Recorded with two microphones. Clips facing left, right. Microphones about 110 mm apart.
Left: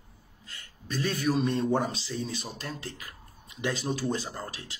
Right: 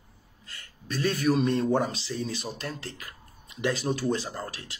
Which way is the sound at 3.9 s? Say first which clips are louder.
Right 3 dB; 20° right (ahead or behind).